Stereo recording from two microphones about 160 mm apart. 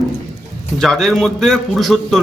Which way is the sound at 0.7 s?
5° left (ahead or behind).